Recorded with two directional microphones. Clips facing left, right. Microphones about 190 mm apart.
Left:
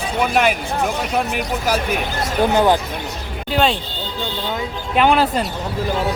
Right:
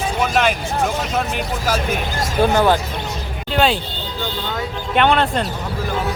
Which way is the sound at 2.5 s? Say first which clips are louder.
Left 2 dB; 15° left (ahead or behind).